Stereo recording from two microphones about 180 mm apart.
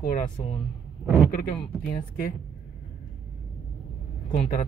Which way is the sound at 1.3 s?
50° left (ahead or behind).